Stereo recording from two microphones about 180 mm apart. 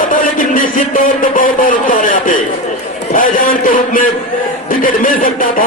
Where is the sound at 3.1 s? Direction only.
50° left (ahead or behind).